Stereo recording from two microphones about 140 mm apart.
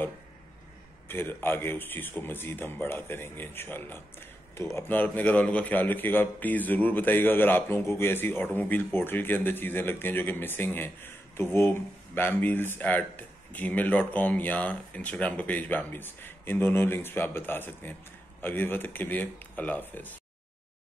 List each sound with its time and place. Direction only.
1.0 s speech: 15° left (ahead or behind)